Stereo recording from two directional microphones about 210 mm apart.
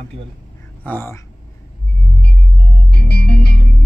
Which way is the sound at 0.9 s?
10° left (ahead or behind).